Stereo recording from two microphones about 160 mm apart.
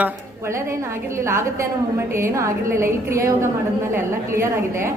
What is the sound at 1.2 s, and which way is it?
A woman's voice, 15° right (ahead or behind).